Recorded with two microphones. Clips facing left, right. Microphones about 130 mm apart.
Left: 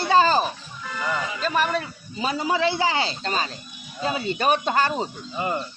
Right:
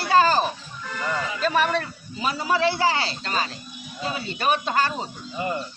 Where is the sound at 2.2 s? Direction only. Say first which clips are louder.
Even; 20° left (ahead or behind).